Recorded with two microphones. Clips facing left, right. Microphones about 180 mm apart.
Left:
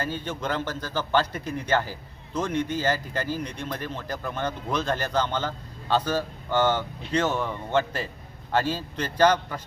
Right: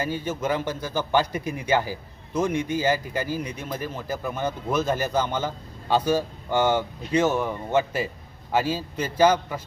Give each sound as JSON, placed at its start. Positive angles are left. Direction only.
{"t": 0.0, "sound": "a man's voice", "side_deg": -10}